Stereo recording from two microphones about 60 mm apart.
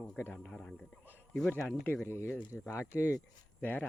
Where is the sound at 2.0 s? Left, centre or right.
Left.